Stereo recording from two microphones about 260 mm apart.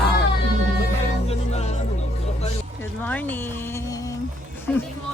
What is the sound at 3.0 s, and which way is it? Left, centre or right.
Music, centre.